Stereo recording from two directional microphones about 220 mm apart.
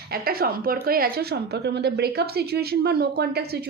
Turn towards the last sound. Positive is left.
turn(degrees=-45)  # may be behind; listen again after turning